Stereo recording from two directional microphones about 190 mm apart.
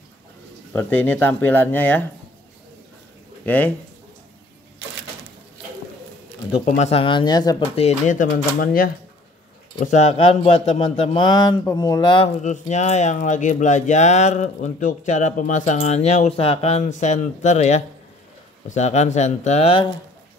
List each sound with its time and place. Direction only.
0.7 s speech: 10° left (ahead or behind)
3.4 s speech: 10° left (ahead or behind)
6.6 s speech: 35° left (ahead or behind)
7.7 s speech: 40° left (ahead or behind)
9.8 s speech: 40° left (ahead or behind)
12.4 s speech: 40° left (ahead or behind)